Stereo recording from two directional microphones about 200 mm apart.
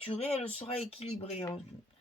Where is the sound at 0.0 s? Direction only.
30° left (ahead or behind).